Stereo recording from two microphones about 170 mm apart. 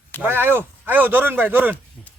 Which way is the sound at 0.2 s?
15° right (ahead or behind).